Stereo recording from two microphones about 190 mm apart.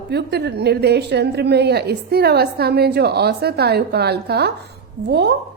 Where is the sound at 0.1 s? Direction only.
60° right (ahead or behind).